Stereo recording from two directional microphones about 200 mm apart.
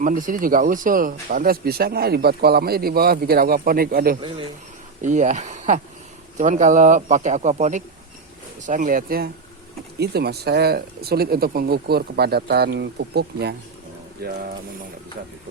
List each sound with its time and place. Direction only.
0.0 s a man's voice: 40° right (ahead or behind)